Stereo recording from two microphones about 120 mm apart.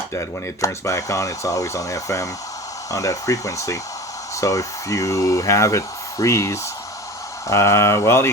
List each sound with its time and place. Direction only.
0.1 s speech: 25° left (ahead or behind)